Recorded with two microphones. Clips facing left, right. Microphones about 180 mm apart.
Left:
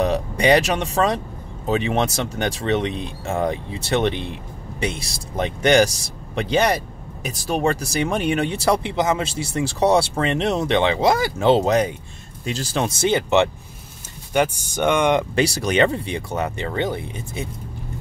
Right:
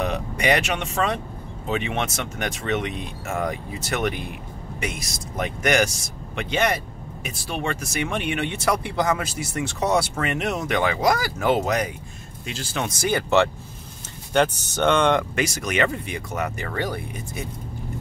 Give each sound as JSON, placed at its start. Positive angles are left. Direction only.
{"t": 0.0, "sound": "speech", "side_deg": 35}
{"t": 15.3, "sound": "speech", "side_deg": 30}